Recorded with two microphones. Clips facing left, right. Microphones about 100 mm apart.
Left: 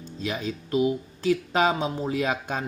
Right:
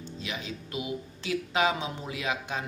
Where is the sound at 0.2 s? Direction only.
40° left (ahead or behind).